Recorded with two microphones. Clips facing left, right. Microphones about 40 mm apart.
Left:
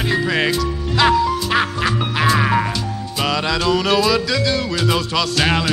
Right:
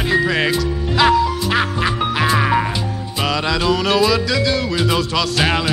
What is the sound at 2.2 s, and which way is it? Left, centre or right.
Music, centre.